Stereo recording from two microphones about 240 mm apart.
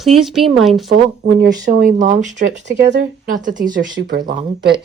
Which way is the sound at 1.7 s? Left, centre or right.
Right.